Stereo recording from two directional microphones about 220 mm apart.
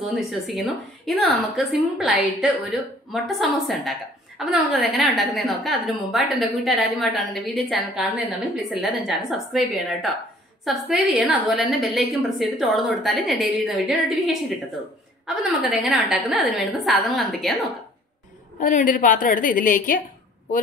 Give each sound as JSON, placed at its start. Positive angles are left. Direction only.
{"t": 0.0, "sound": "a woman's voice", "side_deg": 0}
{"t": 18.6, "sound": "a woman's voice", "side_deg": 35}